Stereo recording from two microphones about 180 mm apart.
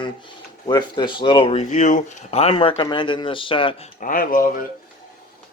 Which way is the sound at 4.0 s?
50° left (ahead or behind).